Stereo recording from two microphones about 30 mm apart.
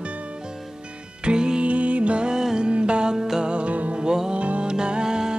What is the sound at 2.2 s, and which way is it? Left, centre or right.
Music, right.